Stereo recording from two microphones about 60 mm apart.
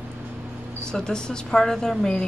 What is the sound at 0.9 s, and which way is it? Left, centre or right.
A woman's voice, centre.